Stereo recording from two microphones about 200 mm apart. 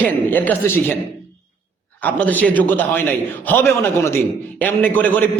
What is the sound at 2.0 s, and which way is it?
A man's voice, 10° left (ahead or behind).